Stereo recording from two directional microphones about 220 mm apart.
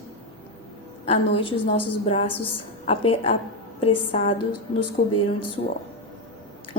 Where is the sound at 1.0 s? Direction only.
25° left (ahead or behind).